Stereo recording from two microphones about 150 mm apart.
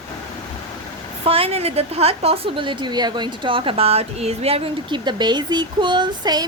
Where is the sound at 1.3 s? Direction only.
40° right (ahead or behind).